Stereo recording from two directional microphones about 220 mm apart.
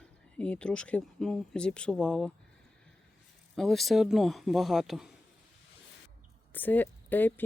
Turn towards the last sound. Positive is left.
turn(degrees=10)  # may be behind; listen again after turning